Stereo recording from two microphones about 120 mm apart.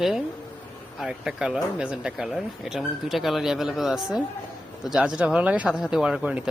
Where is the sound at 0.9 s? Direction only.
5° right (ahead or behind).